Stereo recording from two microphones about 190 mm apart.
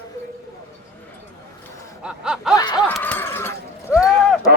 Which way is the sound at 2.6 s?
20° left (ahead or behind).